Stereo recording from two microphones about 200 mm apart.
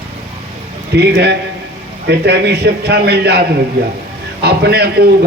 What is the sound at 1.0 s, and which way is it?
A man's voice, 55° right (ahead or behind).